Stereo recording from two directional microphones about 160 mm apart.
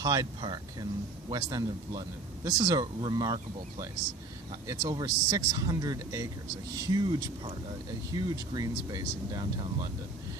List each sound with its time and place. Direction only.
0.0 s speech: 25° right (ahead or behind)